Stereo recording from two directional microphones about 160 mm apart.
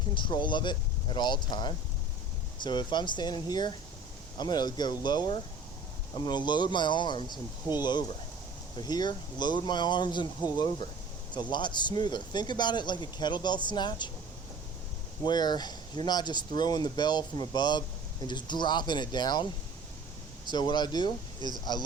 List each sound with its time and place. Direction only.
0.1 s speech: 30° left (ahead or behind)
15.2 s speech: 25° left (ahead or behind)